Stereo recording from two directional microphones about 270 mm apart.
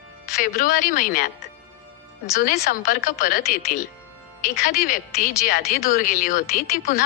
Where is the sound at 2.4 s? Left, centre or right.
Left.